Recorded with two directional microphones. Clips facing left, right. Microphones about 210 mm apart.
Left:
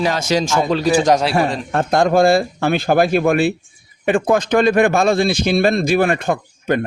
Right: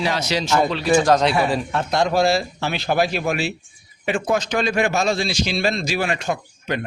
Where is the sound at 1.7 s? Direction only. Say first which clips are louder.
Left 8 dB; 50° left (ahead or behind).